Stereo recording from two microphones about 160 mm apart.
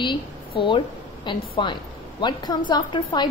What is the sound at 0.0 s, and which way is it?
A woman's voice, 30° left (ahead or behind).